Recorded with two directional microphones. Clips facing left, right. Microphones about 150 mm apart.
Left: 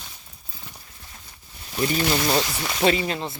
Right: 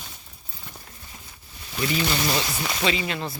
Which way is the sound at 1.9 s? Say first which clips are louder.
Left 2 dB; 40° left (ahead or behind).